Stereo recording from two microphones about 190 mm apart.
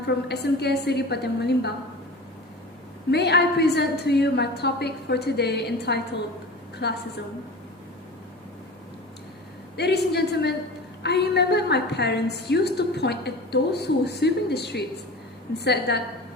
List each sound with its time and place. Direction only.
0.0 s a woman's voice: 60° left (ahead or behind)
3.1 s a woman's voice: 60° left (ahead or behind)
9.7 s a woman's voice: 60° left (ahead or behind)